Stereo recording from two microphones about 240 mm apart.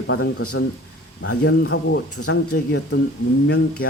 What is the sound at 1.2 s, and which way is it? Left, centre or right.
Speech, left.